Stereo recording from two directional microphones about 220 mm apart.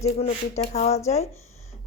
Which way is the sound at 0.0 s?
30° left (ahead or behind).